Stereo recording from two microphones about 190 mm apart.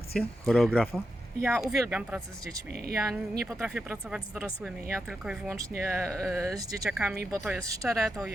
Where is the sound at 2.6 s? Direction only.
55° right (ahead or behind).